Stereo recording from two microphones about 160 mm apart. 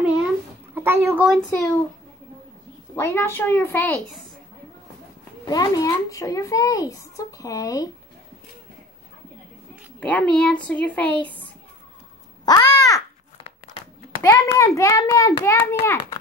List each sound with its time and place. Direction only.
0.7 s speech: 15° right (ahead or behind)
1.5 s a child's voice: 20° left (ahead or behind)
3.0 s speech: 15° left (ahead or behind)
5.5 s a child's voice: 20° left (ahead or behind)
9.9 s speech: 10° left (ahead or behind)
12.4 s a child's voice: 25° left (ahead or behind)
14.2 s speech: 15° left (ahead or behind)